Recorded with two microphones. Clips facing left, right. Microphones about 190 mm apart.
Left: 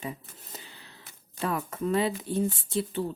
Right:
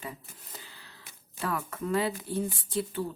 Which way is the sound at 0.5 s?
20° left (ahead or behind).